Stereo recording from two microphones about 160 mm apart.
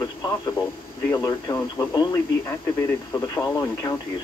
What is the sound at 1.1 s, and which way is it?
Speech, 20° left (ahead or behind).